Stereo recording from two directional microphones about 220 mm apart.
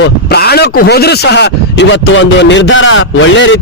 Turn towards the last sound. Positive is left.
turn(degrees=55)  # may be behind; listen again after turning